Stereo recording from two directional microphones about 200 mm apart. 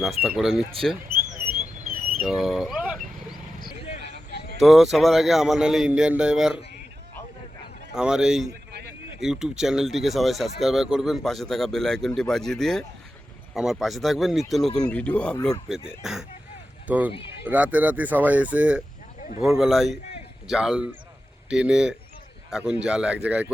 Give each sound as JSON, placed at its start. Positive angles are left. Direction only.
{"t": 0.0, "sound": "speech", "side_deg": 0}
{"t": 1.9, "sound": "vehicle", "side_deg": -45}
{"t": 2.2, "sound": "speech", "side_deg": 0}
{"t": 3.7, "sound": "vehicle", "side_deg": 30}
{"t": 4.3, "sound": "a sound", "side_deg": 55}
{"t": 4.6, "sound": "speech", "side_deg": 0}
{"t": 7.9, "sound": "speech", "side_deg": -5}